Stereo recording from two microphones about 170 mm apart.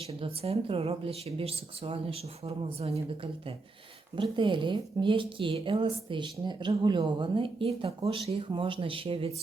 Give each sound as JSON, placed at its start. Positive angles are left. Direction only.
{"t": 0.2, "sound": "speech", "side_deg": -35}
{"t": 4.2, "sound": "a woman's voice", "side_deg": -30}